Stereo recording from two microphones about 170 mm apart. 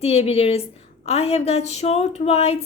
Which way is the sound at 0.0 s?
35° left (ahead or behind).